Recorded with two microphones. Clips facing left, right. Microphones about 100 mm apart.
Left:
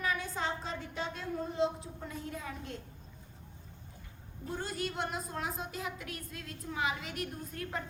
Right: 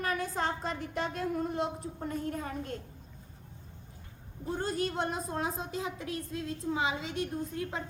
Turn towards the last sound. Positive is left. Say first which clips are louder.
# right 5 dB
turn(degrees=-20)  # may be behind; listen again after turning